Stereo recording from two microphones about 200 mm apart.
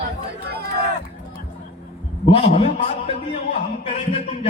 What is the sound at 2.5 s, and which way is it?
A man's voice, 35° left (ahead or behind).